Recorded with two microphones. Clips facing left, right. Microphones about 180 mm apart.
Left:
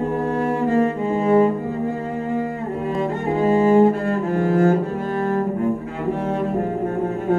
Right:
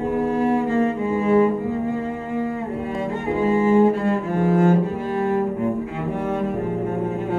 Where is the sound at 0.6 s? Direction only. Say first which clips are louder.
Left 2 dB; 40° left (ahead or behind).